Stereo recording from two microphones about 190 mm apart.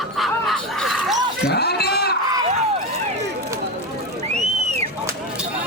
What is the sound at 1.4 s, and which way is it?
Speech, 60° left (ahead or behind).